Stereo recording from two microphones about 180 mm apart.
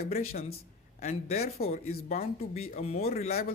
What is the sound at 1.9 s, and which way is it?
Speech, 55° left (ahead or behind).